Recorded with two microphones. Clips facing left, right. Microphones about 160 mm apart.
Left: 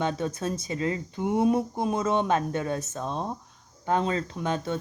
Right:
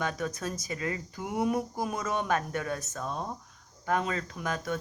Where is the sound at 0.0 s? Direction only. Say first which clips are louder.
Left 4 dB; 25° left (ahead or behind).